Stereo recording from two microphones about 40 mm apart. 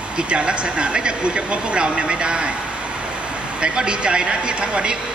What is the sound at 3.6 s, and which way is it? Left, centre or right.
Speech, right.